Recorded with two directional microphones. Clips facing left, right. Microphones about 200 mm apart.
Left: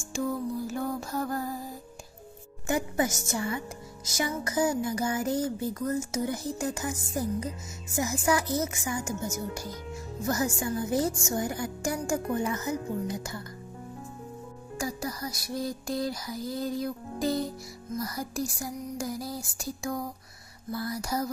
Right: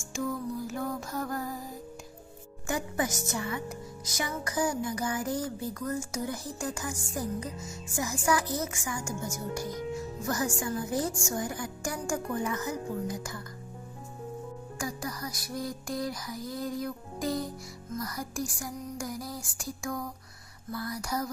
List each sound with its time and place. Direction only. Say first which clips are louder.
0.1 s music: left 3 dB; 35° left (ahead or behind)
2.6 s a woman's voice: left 4 dB; 25° left (ahead or behind)
14.8 s music: left 3 dB; 25° left (ahead or behind)
17.9 s speech: left 2 dB; 25° left (ahead or behind)